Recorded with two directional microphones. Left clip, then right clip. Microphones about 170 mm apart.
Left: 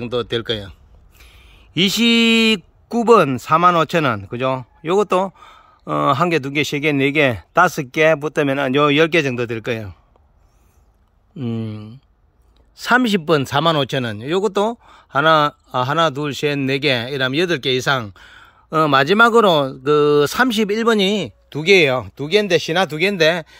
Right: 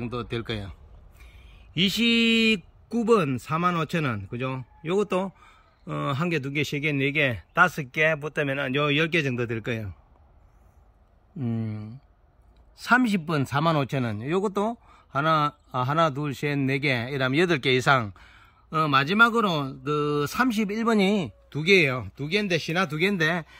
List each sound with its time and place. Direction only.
0.0 s speech: 10° left (ahead or behind)
1.2 s speech: 15° left (ahead or behind)
11.3 s speech: 10° left (ahead or behind)
12.8 s speech: 15° left (ahead or behind); by 18.1 s 5° right (ahead or behind)
18.1 s speech: 15° left (ahead or behind)
21.5 s speech: 15° left (ahead or behind)